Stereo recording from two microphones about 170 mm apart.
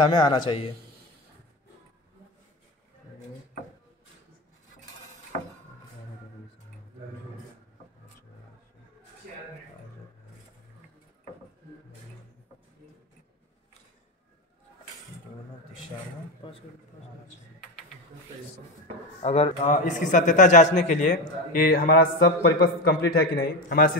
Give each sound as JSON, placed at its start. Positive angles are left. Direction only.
{"t": 0.0, "sound": "a man's voice", "side_deg": 25}
{"t": 16.4, "sound": "a sound", "side_deg": 30}
{"t": 19.2, "sound": "a man's voice", "side_deg": 40}